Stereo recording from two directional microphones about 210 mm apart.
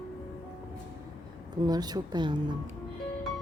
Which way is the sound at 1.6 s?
20° right (ahead or behind).